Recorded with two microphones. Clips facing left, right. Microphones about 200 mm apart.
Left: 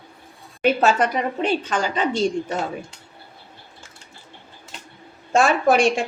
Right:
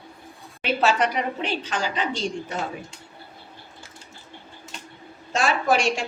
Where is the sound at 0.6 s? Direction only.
50° left (ahead or behind).